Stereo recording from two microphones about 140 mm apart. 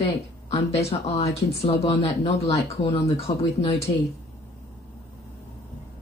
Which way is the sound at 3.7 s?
20° left (ahead or behind).